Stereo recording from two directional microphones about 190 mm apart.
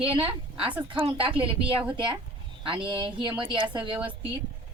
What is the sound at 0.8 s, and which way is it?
Speech, 25° right (ahead or behind).